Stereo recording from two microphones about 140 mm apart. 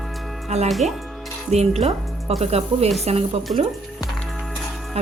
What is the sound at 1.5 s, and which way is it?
A woman's voice, 50° right (ahead or behind).